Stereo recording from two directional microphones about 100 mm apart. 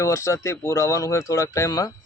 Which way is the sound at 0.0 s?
30° left (ahead or behind).